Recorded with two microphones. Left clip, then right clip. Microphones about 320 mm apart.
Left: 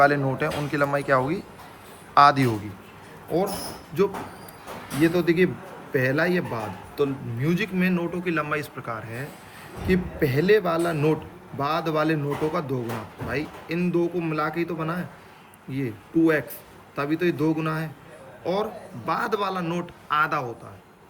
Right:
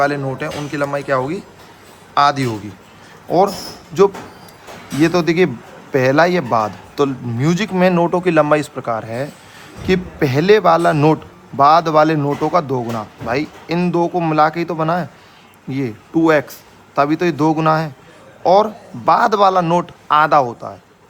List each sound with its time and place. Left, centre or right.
0.0 s speech: centre
5.0 s a man's voice: centre